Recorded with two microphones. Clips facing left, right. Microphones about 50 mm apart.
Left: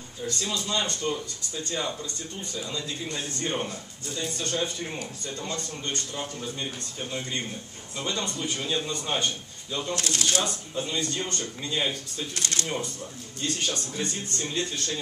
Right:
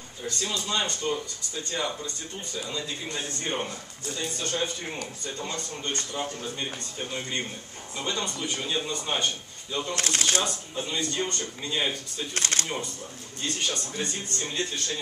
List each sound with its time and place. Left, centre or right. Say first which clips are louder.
0.5 s a man's voice: even; centre
9.9 s speech: right 1 dB; right
10.4 s speech: left 1 dB; centre
12.4 s speech: right 3 dB; right
13.4 s speech: left 1 dB; centre